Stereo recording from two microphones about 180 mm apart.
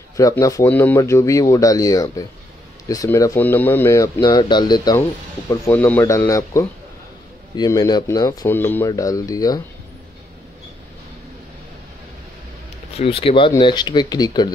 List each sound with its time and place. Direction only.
0.2 s speech: 20° left (ahead or behind)
5.5 s speech: 10° left (ahead or behind)
12.9 s speech: 30° left (ahead or behind)